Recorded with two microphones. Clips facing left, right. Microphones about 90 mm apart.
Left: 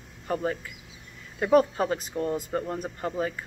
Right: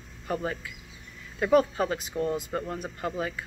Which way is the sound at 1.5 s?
30° left (ahead or behind).